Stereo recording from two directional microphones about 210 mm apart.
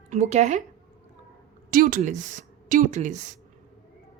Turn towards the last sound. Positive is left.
turn(degrees=-35)  # may be behind; listen again after turning